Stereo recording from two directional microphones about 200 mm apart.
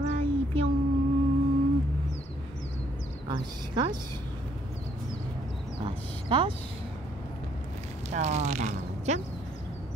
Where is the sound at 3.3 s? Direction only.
20° right (ahead or behind).